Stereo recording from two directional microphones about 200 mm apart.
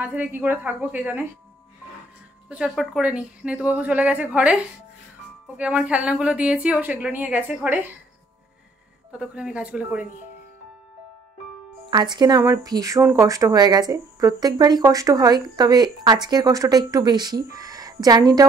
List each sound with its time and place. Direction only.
0.0 s a woman's voice: 10° right (ahead or behind)
2.5 s a woman's voice: 5° right (ahead or behind)
5.6 s a woman's voice: 5° right (ahead or behind)
9.2 s speech: 5° right (ahead or behind)
11.9 s speech: 20° right (ahead or behind)